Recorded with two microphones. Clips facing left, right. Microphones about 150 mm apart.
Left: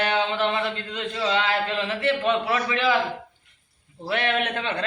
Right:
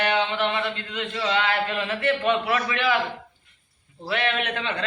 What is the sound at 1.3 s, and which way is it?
A man's voice, 25° left (ahead or behind).